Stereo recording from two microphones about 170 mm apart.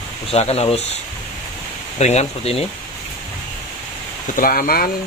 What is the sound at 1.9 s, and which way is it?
Speech, 40° left (ahead or behind).